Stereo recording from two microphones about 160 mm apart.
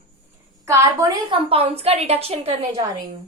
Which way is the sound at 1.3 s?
35° right (ahead or behind).